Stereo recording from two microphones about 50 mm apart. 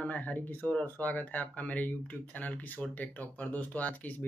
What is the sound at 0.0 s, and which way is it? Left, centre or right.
Speech, left.